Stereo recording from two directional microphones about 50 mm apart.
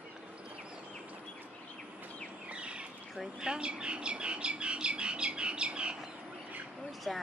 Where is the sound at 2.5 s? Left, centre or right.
Right.